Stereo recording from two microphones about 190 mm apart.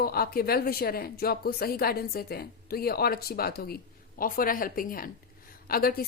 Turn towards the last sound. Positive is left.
turn(degrees=50)  # may be behind; listen again after turning